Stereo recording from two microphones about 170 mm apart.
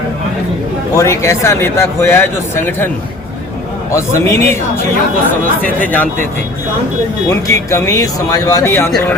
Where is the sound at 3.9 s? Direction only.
15° left (ahead or behind).